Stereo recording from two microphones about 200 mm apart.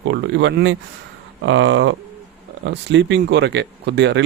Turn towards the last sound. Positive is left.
turn(degrees=-65)  # may be behind; listen again after turning